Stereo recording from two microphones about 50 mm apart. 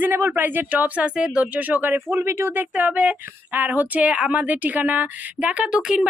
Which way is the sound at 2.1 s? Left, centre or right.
Right.